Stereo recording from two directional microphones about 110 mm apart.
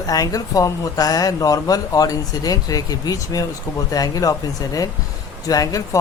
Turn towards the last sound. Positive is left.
turn(degrees=35)  # may be behind; listen again after turning